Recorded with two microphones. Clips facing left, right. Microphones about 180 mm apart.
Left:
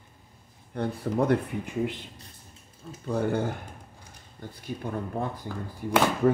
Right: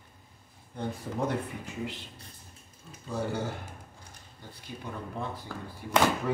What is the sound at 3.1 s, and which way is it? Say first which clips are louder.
Speech: left 6 dB; 55° left (ahead or behind).